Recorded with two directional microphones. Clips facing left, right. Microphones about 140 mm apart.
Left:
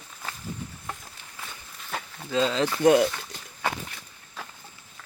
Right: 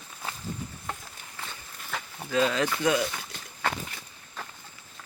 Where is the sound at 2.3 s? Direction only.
25° left (ahead or behind).